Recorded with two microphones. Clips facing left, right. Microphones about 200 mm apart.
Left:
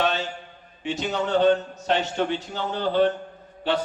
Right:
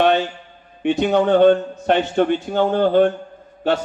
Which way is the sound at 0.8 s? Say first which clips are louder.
Right 10 dB; 60° right (ahead or behind).